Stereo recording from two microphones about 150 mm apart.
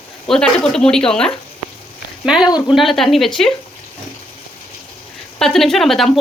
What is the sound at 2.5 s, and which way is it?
Speech, 25° left (ahead or behind).